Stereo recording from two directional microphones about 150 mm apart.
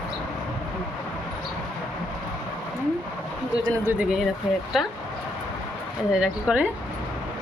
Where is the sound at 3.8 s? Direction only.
10° right (ahead or behind).